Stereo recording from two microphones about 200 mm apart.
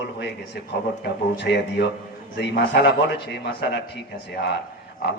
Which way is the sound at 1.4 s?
60° left (ahead or behind).